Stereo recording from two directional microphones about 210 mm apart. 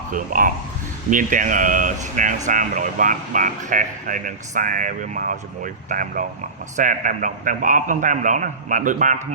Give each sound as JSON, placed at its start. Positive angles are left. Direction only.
{"t": 0.1, "sound": "speech", "side_deg": -40}